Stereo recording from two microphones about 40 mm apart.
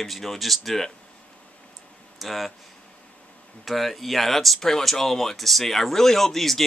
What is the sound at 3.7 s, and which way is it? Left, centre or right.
Speech, centre.